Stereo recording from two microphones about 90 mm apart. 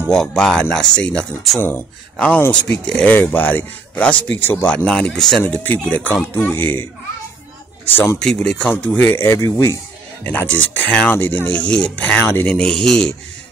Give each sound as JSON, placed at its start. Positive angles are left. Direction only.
{"t": 0.1, "sound": "speech", "side_deg": 10}
{"t": 4.6, "sound": "speech", "side_deg": 10}
{"t": 7.9, "sound": "speech", "side_deg": 30}
{"t": 8.5, "sound": "speech", "side_deg": 10}
{"t": 10.2, "sound": "speech", "side_deg": 20}
{"t": 12.4, "sound": "speech", "side_deg": 10}